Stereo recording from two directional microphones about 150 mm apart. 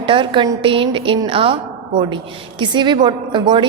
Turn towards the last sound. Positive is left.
turn(degrees=-30)  # may be behind; listen again after turning